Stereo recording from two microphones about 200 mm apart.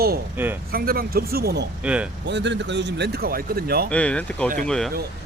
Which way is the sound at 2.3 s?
60° right (ahead or behind).